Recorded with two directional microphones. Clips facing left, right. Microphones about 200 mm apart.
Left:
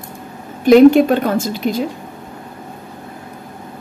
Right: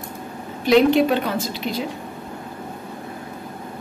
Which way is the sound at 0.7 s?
50° left (ahead or behind).